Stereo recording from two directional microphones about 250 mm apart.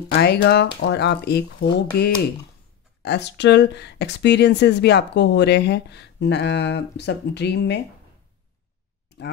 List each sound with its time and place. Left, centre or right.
0.1 s speech: left